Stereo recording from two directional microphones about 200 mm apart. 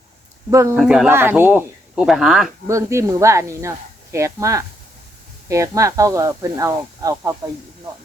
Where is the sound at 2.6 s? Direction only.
15° right (ahead or behind).